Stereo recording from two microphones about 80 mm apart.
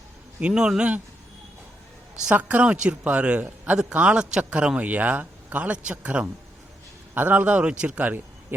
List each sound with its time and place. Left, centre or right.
0.3 s a man's voice: centre
2.3 s a man's voice: centre